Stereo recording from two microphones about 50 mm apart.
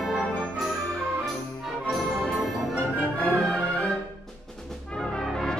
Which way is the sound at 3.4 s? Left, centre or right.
Centre.